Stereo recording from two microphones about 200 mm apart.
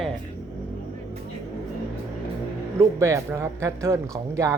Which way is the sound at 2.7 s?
15° right (ahead or behind).